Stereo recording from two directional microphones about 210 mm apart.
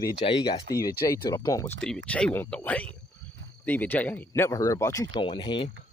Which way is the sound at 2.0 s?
5° left (ahead or behind).